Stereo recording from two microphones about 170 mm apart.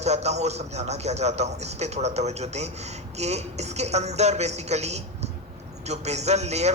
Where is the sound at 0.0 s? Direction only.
40° right (ahead or behind).